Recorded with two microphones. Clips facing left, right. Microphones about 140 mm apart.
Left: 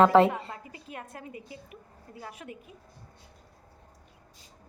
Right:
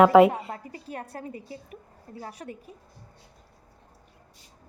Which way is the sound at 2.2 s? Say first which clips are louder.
Right 3 dB; 35° right (ahead or behind).